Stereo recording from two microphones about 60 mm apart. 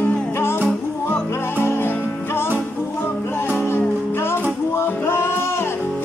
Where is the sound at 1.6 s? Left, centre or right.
Left.